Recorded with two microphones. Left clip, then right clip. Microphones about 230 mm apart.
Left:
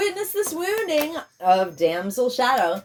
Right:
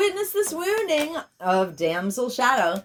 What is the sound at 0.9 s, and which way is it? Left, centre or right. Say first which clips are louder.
Speech: left 1 dB; right.